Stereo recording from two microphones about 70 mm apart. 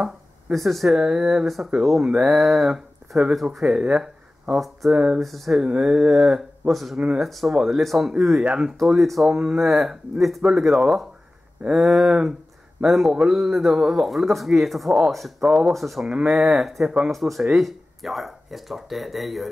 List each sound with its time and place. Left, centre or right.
0.0 s speech: centre
5.2 s speech: centre
5.6 s speech: centre
16.1 s speech: centre
16.5 s speech: centre